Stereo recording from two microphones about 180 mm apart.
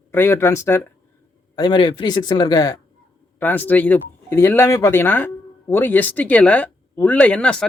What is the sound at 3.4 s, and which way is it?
Speech, 10° left (ahead or behind).